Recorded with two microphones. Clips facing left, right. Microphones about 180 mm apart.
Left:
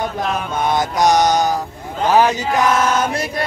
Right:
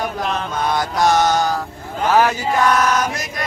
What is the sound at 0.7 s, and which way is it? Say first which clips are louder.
Mantra: left 2 dB; 20° left (ahead or behind).